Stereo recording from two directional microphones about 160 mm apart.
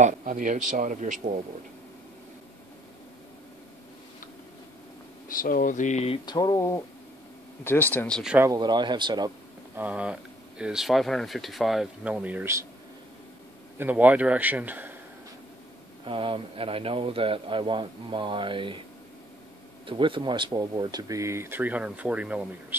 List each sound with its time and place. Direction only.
0.0 s a man's voice: 50° right (ahead or behind)
5.3 s speech: 55° left (ahead or behind)
6.2 s speech: 25° left (ahead or behind)
8.2 s speech: 5° right (ahead or behind)
8.5 s speech: 25° right (ahead or behind)
9.8 s speech: 10° right (ahead or behind)
13.7 s speech: 10° right (ahead or behind)
16.1 s a man's voice: 35° right (ahead or behind)
19.9 s speech: 30° right (ahead or behind); by 22.8 s 10° right (ahead or behind)